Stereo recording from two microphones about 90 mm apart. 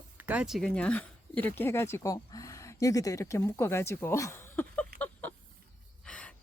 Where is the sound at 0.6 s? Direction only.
10° left (ahead or behind); by 2.1 s 30° left (ahead or behind).